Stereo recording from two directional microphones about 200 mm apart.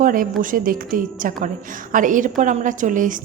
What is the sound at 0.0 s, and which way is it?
A woman's voice, 45° right (ahead or behind).